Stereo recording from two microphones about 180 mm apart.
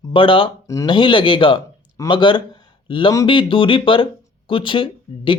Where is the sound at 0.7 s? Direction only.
15° left (ahead or behind).